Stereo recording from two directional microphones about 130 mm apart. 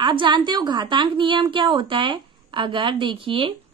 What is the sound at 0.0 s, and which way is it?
A woman's voice, 40° right (ahead or behind).